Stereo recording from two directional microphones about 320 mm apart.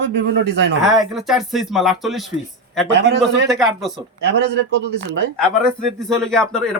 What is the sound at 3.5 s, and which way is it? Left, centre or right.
Speech, centre.